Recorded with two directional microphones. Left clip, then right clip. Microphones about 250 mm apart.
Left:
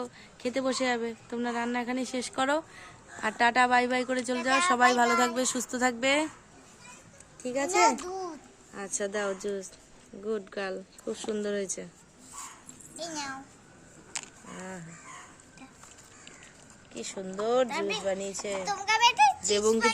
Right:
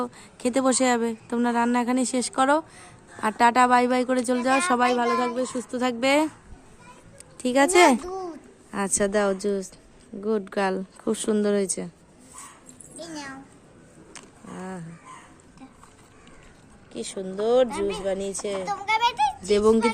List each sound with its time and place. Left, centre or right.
0.0 s speech: right
4.8 s speech: centre
6.0 s speech: centre
8.0 s a child's voice: centre
8.7 s speech: right
13.0 s a sound: centre
16.9 s speech: centre
17.7 s speech: left
18.0 s speech: centre
18.6 s children playing: centre
19.5 s speech: centre